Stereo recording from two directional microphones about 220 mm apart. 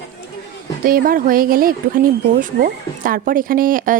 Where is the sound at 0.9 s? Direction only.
40° right (ahead or behind).